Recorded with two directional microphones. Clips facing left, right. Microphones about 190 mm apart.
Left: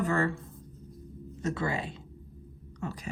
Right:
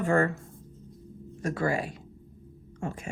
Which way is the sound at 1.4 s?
25° left (ahead or behind).